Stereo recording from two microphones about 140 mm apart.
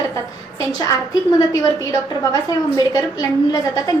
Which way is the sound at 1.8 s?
25° left (ahead or behind).